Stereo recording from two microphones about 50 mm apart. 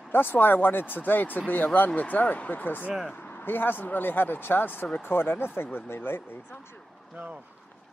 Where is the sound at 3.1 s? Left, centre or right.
Left.